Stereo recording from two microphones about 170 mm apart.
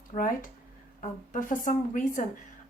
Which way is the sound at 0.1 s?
55° left (ahead or behind).